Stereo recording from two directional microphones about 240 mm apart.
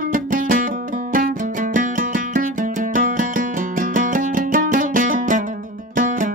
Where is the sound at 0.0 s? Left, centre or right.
Right.